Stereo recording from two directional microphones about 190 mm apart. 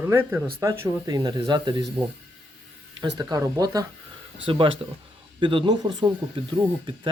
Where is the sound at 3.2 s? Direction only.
20° right (ahead or behind).